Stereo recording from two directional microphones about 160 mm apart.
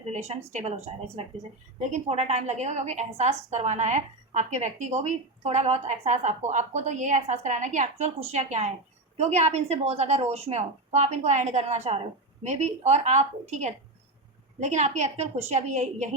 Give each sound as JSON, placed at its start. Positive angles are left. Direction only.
{"t": 0.1, "sound": "speech", "side_deg": -45}
{"t": 1.9, "sound": "a woman's voice", "side_deg": -45}